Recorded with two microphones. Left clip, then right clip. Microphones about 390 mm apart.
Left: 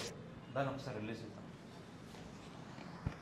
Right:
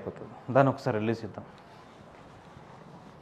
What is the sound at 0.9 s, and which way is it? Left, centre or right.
Speech, right.